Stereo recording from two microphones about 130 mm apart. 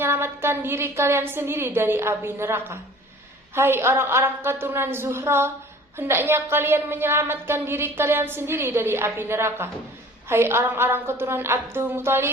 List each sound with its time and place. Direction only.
0.0 s a woman's voice: 20° right (ahead or behind)